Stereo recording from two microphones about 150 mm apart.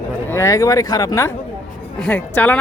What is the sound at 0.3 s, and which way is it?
Speech, 20° left (ahead or behind).